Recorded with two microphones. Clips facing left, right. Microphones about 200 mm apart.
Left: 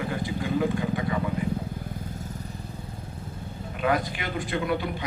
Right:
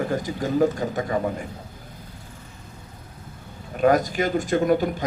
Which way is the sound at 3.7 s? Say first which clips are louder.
Right 7 dB; 45° right (ahead or behind).